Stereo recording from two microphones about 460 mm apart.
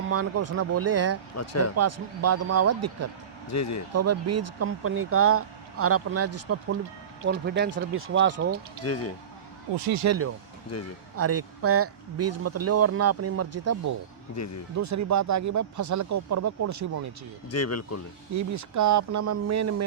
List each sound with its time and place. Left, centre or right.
0.1 s speech: right
1.4 s speech: left
1.7 s speech: right
3.5 s speech: left
3.9 s speech: right
8.8 s speech: left
9.7 s speech: right
10.0 s speech: right
14.3 s speech: left
14.8 s speech: right
17.5 s speech: left
18.3 s speech: right